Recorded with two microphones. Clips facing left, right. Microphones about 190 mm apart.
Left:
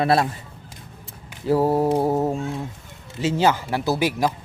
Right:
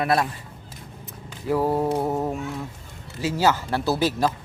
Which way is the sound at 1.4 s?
25° left (ahead or behind).